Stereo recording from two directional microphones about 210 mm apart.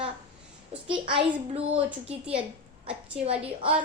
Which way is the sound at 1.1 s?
25° right (ahead or behind).